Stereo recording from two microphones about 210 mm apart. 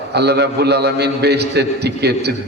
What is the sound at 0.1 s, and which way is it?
A man's voice, 50° right (ahead or behind).